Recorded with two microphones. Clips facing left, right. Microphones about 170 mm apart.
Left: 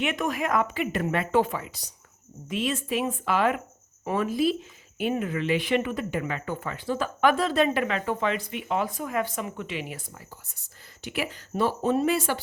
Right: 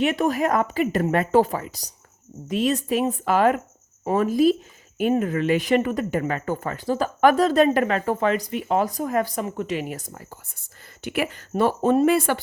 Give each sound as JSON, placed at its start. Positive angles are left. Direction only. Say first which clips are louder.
{"t": 0.0, "sound": "speech", "louder": "right 6 dB", "side_deg": -35}